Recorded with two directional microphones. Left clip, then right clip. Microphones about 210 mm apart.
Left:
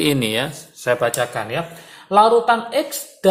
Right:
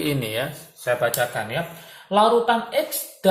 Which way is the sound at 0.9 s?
45° left (ahead or behind).